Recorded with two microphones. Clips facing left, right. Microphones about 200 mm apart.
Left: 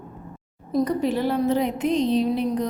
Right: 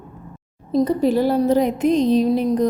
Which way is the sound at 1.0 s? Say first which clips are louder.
Right 5 dB; 40° right (ahead or behind).